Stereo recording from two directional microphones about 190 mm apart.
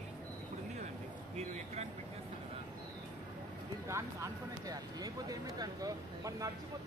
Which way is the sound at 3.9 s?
15° right (ahead or behind).